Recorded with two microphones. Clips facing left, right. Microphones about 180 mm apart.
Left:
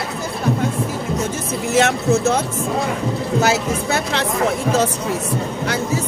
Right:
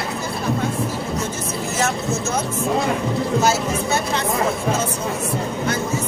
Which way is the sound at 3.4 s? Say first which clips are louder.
Left 1 dB; 80° left.